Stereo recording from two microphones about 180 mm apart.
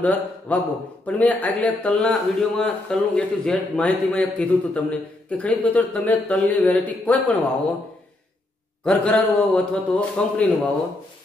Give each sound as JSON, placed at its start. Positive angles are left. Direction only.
{"t": 0.0, "sound": "a man's voice", "side_deg": 10}
{"t": 8.8, "sound": "a man's voice", "side_deg": 5}